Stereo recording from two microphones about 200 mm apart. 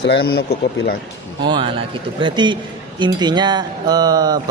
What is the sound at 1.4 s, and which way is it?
Speech, 25° right (ahead or behind).